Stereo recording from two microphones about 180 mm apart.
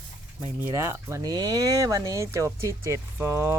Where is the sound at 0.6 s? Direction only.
15° right (ahead or behind).